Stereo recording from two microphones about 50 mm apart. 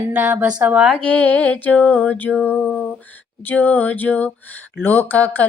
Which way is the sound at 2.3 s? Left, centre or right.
Right.